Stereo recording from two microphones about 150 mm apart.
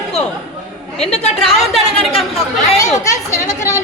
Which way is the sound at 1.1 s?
45° left (ahead or behind).